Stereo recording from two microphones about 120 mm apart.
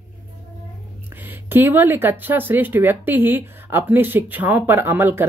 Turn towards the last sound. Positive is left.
turn(degrees=-15)  # may be behind; listen again after turning